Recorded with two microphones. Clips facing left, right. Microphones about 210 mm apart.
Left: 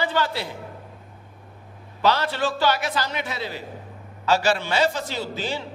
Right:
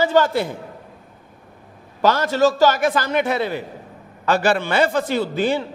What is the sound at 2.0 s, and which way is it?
A man's voice, 45° right (ahead or behind).